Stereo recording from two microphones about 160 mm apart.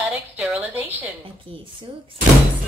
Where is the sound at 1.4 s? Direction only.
30° right (ahead or behind).